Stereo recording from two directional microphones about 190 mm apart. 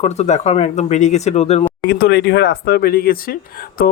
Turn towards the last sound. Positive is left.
turn(degrees=50)  # may be behind; listen again after turning